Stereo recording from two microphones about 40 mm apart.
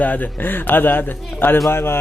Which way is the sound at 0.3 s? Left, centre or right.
Left.